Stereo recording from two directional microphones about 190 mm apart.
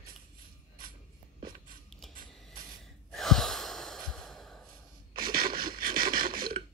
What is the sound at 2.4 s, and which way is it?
Breathing, centre (ahead or behind).